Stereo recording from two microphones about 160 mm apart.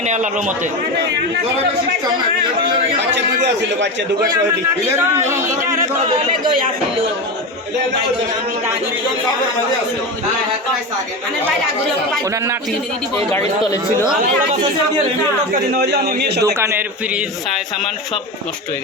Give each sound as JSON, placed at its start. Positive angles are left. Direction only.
{"t": 0.0, "sound": "speech", "side_deg": -50}
{"t": 13.1, "sound": "speech", "side_deg": 20}
{"t": 15.9, "sound": "a man's voice", "side_deg": -80}
{"t": 16.6, "sound": "speech", "side_deg": -15}